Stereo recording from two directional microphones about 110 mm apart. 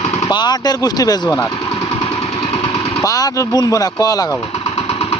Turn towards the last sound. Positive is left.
turn(degrees=35)  # may be behind; listen again after turning